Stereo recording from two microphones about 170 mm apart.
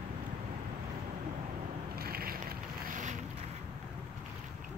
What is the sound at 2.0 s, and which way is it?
Boat, 65° right (ahead or behind).